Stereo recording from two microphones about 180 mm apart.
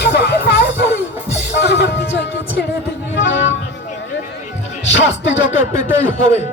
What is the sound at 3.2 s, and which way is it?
Music, 85° left.